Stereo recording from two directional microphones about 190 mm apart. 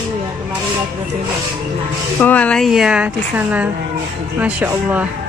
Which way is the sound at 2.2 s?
5° left (ahead or behind).